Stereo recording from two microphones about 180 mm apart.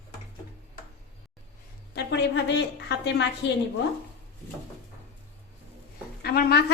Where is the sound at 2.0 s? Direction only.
75° left (ahead or behind).